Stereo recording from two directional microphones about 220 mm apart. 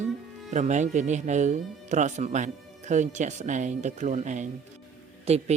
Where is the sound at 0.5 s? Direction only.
35° right (ahead or behind).